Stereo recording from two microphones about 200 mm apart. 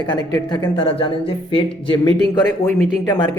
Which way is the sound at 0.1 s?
15° left (ahead or behind).